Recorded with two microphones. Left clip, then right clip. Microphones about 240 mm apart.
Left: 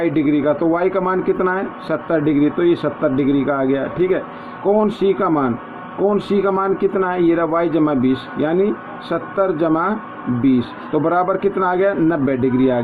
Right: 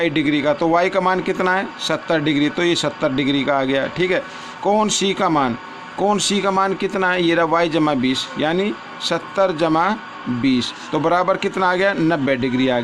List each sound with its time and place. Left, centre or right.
0.0 s a man's voice: right